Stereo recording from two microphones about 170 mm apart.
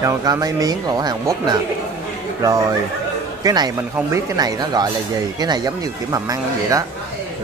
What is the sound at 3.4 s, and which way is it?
Speech, 20° right (ahead or behind).